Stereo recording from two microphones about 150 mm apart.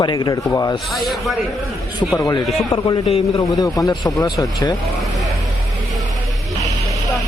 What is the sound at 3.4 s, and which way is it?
Speech, 25° left (ahead or behind).